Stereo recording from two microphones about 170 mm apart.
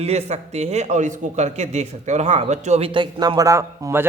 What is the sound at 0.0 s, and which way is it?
A man's voice, 40° right (ahead or behind).